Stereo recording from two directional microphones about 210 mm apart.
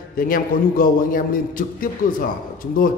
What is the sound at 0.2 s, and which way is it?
A man's voice, 40° left (ahead or behind).